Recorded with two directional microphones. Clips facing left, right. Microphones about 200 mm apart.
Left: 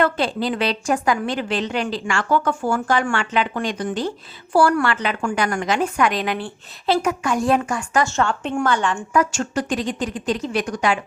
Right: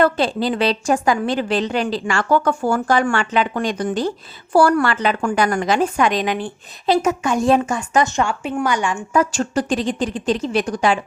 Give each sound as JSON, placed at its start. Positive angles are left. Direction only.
{"t": 0.0, "sound": "a woman's voice", "side_deg": -35}
{"t": 9.1, "sound": "a woman's voice", "side_deg": -35}